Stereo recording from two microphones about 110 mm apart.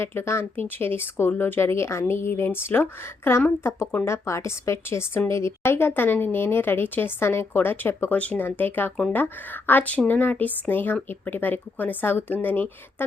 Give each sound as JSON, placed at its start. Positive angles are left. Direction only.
{"t": 0.0, "sound": "speech", "side_deg": 20}